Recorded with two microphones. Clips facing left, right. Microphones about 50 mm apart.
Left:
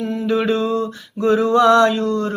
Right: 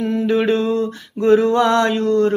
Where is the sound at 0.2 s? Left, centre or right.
Right.